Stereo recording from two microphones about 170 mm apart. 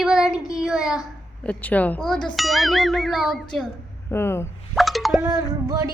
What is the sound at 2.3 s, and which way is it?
Ding, centre (ahead or behind).